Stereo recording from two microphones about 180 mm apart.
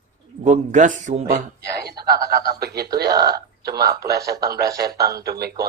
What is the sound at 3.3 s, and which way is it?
A man's voice, 60° right (ahead or behind).